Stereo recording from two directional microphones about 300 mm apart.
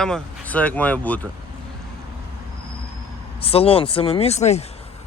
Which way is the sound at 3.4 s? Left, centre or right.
Centre.